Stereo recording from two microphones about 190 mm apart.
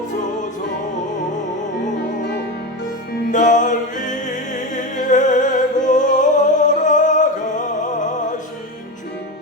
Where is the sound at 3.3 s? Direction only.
40° left (ahead or behind).